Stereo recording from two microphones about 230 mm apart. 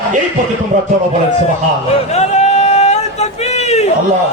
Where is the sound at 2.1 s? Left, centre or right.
Left.